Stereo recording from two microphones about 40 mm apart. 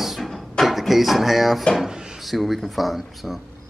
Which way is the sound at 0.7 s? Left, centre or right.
Centre.